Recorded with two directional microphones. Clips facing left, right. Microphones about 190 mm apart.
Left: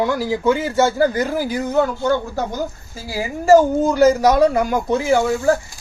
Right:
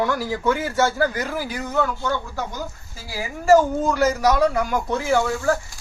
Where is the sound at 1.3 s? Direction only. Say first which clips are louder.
Left 6 dB; 40° left (ahead or behind).